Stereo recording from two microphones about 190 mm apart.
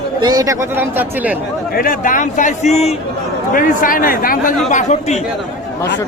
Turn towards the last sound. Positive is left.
turn(degrees=35)  # may be behind; listen again after turning